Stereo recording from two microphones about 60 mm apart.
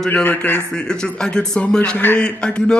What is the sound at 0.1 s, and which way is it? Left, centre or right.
Speech, left.